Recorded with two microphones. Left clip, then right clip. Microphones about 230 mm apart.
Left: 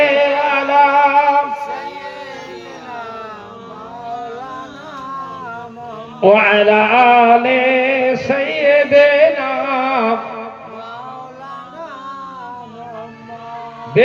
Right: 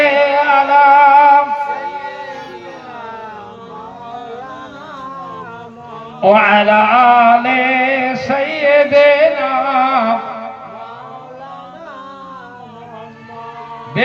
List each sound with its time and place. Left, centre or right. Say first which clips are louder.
0.0 s music: right 2 dB; right
6.1 s music: right 1 dB; right